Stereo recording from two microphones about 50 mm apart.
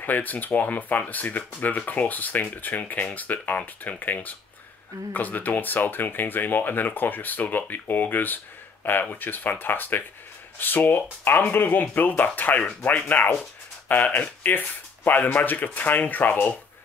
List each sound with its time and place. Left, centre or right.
0.0 s speech: left